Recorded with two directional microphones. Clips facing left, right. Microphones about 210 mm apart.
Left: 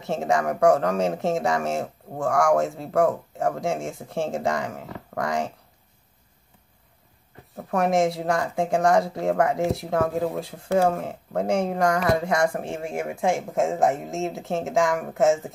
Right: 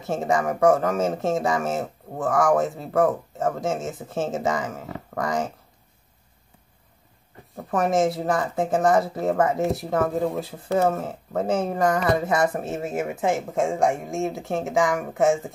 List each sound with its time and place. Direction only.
0.0 s speech: centre (ahead or behind)
7.5 s speech: centre (ahead or behind)